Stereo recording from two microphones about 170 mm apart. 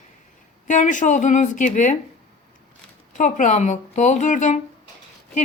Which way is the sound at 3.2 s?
45° left (ahead or behind).